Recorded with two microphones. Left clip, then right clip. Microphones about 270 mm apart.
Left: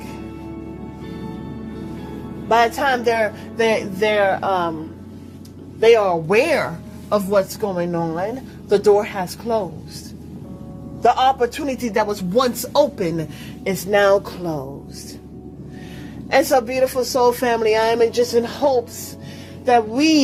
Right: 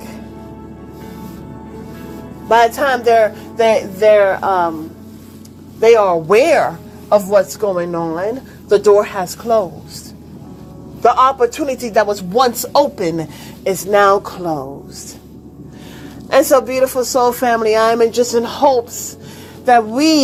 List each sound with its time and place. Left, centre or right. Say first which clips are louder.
2.5 s speech: right 4 dB; centre
5.8 s speech: right 4 dB; centre
11.0 s speech: right 4 dB; centre
16.3 s speech: right 5 dB; centre